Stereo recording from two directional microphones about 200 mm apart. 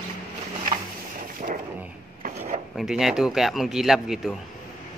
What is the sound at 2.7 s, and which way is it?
A man's voice, centre (ahead or behind).